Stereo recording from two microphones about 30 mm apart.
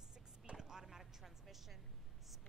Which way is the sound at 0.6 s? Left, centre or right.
Centre.